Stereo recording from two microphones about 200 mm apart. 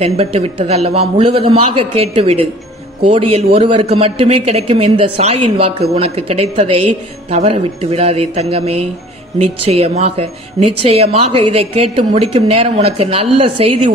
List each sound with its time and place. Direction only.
0.0 s a man's voice: 30° right (ahead or behind)